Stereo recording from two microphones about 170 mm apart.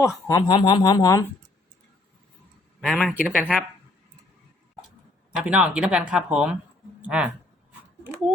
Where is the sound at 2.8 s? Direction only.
Centre (ahead or behind).